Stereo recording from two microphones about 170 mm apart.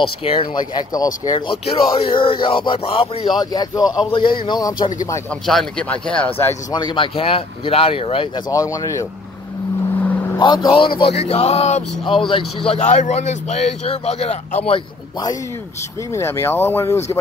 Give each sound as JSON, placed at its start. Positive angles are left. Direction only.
{"t": 0.0, "sound": "a man's voice", "side_deg": 35}
{"t": 5.3, "sound": "speech", "side_deg": 5}
{"t": 6.7, "sound": "a man's voice", "side_deg": 25}
{"t": 8.5, "sound": "speech", "side_deg": 20}
{"t": 10.4, "sound": "a man's voice", "side_deg": 25}
{"t": 16.1, "sound": "speech", "side_deg": 15}